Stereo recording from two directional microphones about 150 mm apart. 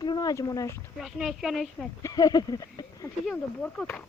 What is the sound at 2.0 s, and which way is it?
Speech, 25° left (ahead or behind).